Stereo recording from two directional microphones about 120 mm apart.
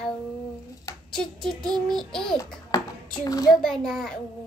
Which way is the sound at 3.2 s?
30° left (ahead or behind).